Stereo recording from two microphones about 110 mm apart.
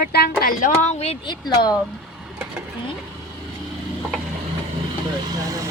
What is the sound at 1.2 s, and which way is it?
Speech, 40° left (ahead or behind).